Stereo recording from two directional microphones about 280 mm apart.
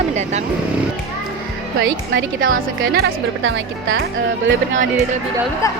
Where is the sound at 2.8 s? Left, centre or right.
Right.